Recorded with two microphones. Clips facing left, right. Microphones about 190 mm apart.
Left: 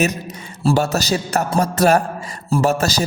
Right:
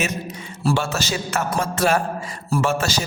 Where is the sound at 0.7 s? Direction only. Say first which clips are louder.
Left 5 dB; 40° left (ahead or behind).